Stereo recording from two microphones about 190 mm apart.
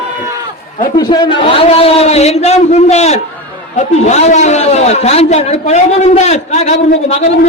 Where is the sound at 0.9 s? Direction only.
20° left (ahead or behind).